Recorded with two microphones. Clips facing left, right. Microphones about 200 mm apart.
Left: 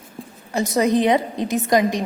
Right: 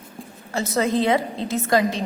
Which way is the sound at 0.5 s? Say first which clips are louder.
Left 3 dB; 15° left (ahead or behind).